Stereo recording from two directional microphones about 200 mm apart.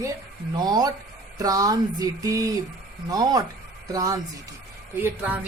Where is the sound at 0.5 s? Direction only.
20° right (ahead or behind).